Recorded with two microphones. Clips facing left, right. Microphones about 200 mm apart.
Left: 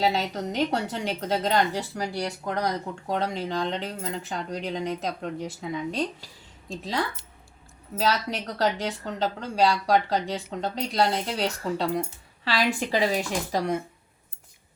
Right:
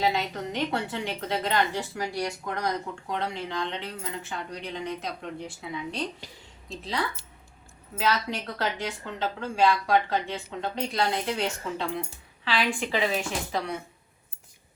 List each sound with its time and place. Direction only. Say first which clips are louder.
0.0 s a woman's voice: left 2 dB; 40° left (ahead or behind)
7.9 s a woman's voice: left 2 dB; 40° left (ahead or behind)